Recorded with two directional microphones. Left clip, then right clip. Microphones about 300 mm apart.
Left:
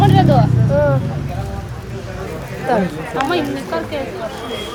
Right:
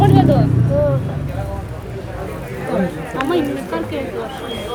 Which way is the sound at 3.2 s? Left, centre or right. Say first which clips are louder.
Left 1 dB; centre.